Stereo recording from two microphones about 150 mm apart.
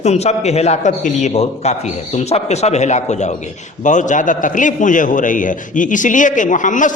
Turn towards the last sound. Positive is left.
turn(degrees=60)  # may be behind; listen again after turning